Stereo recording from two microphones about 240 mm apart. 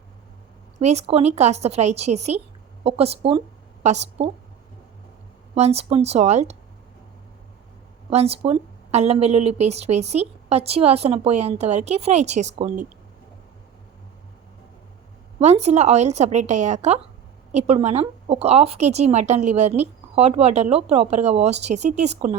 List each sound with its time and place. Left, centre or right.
0.8 s a woman's voice: right
5.5 s speech: right
8.1 s speech: right
15.4 s speech: right